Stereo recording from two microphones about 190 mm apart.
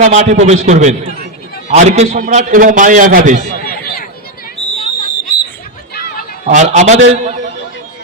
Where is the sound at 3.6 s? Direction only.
50° left (ahead or behind).